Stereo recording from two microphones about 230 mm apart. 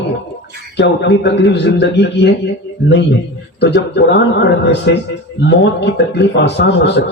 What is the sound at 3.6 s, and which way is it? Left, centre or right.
A man's voice, left.